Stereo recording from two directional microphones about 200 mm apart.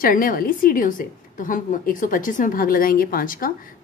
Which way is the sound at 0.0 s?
45° left (ahead or behind).